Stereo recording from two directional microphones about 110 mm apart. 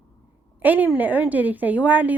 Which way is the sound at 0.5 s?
15° right (ahead or behind).